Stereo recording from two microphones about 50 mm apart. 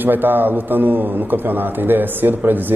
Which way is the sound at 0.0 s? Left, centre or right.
Right.